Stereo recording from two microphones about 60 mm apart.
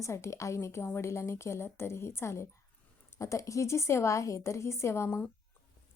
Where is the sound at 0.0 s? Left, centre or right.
Left.